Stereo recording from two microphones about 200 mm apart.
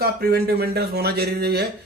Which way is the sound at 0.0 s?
50° right (ahead or behind).